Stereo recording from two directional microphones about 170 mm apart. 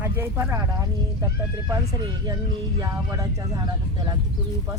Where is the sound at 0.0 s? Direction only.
15° right (ahead or behind).